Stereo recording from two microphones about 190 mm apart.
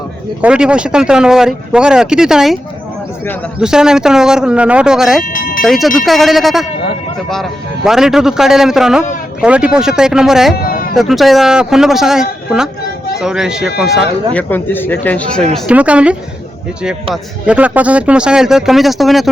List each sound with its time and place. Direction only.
0.4 s speech: 5° right (ahead or behind)
3.6 s speech: 5° right (ahead or behind)
5.2 s speech: 45° left (ahead or behind)
5.6 s speech: centre (ahead or behind)
10.5 s a sound: 50° left (ahead or behind)
10.9 s speech: centre (ahead or behind)
14.3 s speech: 10° left (ahead or behind)
15.5 s speech: 5° right (ahead or behind)
17.4 s speech: 5° right (ahead or behind)